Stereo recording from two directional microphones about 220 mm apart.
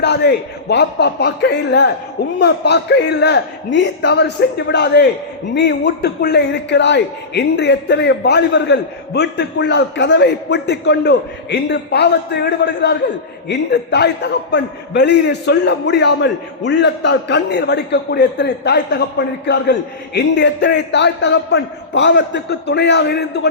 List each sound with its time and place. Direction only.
0.0 s a man's voice: 50° left (ahead or behind)
20.1 s a man's voice: 55° left (ahead or behind)